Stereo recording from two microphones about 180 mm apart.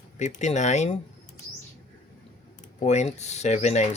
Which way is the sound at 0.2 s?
40° left (ahead or behind).